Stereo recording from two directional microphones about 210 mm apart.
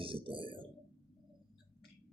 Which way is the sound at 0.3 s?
25° right (ahead or behind).